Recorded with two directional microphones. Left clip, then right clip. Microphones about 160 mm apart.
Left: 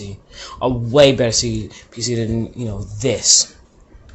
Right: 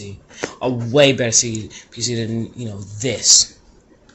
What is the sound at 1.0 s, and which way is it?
Speech, 15° left (ahead or behind).